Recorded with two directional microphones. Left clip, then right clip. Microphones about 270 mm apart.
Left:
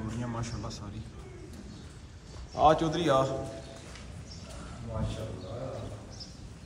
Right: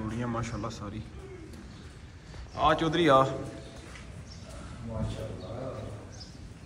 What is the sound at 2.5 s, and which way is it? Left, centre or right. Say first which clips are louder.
Speech: left 1 dB; centre.